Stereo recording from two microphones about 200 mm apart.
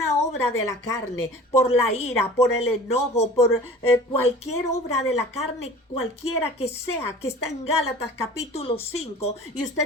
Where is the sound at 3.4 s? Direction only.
10° left (ahead or behind).